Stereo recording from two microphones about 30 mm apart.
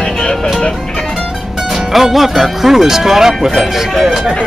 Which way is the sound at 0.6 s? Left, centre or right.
Left.